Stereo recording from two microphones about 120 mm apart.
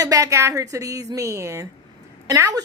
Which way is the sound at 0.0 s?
30° right (ahead or behind).